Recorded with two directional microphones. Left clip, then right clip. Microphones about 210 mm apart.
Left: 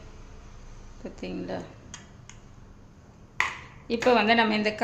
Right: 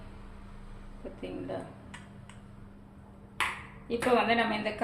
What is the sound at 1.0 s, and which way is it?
Speech, 55° left (ahead or behind).